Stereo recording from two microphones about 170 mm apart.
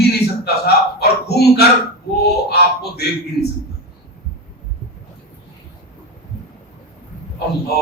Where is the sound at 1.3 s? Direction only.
70° left (ahead or behind).